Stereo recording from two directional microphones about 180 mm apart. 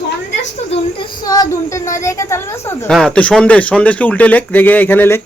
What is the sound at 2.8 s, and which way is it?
Speech, 5° left (ahead or behind).